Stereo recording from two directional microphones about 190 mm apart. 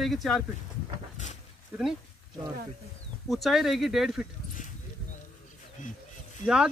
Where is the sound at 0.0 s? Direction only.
Centre (ahead or behind).